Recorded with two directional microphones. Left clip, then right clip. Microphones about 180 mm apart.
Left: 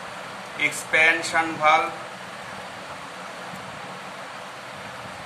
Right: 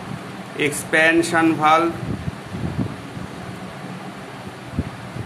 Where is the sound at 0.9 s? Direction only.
50° right (ahead or behind).